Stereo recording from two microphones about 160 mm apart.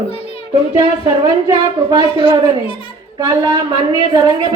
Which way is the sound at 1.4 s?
25° right (ahead or behind).